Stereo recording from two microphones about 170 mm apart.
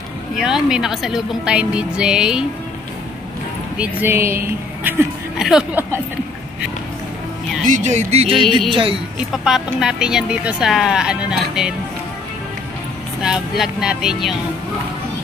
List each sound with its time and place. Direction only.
0.4 s speech: 5° right (ahead or behind)
3.7 s speech: 10° right (ahead or behind)
5.4 s speech: 5° right (ahead or behind)
7.6 s speech: 45° right (ahead or behind)
9.3 s speech: 5° right (ahead or behind)
13.2 s speech: 5° right (ahead or behind)